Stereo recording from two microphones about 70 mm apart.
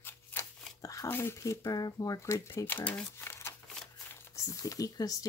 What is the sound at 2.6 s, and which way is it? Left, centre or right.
Speech, left.